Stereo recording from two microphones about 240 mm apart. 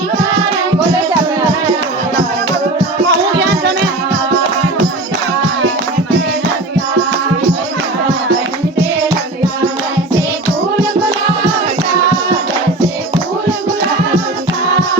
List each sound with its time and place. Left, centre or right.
3.1 s music: right